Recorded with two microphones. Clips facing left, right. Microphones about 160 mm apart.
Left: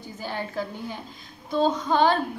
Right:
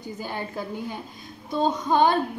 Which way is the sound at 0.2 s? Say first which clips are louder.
Left 3 dB; 15° right (ahead or behind).